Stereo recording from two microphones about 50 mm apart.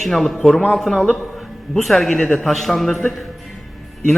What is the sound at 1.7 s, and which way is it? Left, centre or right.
A man's voice, centre.